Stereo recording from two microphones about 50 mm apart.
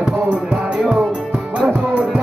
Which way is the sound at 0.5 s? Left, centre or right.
Right.